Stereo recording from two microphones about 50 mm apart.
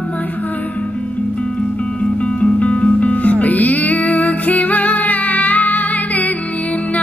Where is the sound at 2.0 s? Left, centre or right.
Left.